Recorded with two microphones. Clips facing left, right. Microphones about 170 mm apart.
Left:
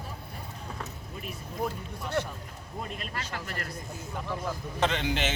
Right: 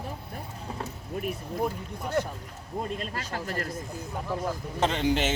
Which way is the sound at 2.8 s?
35° right (ahead or behind).